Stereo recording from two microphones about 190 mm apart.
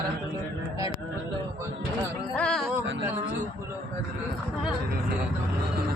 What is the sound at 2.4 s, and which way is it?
Music, 5° left (ahead or behind).